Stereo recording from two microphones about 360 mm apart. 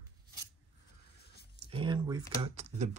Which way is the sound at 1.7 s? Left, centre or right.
Centre.